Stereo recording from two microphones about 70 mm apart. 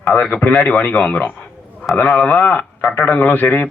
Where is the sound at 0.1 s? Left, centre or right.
Centre.